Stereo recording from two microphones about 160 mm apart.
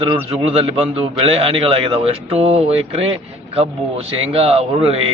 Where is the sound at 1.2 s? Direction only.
40° right (ahead or behind).